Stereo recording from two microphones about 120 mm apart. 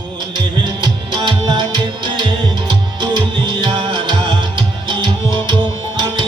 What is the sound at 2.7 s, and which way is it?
Music, 40° right (ahead or behind).